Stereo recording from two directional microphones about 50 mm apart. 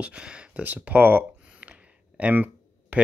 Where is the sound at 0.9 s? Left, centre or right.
Right.